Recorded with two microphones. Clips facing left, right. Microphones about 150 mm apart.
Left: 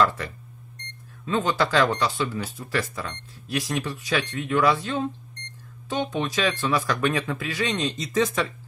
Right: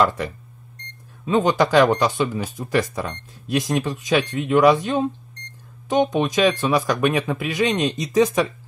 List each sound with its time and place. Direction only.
1.2 s speech: 20° right (ahead or behind)